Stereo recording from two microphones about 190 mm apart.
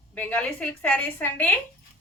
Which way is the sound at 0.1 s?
10° left (ahead or behind).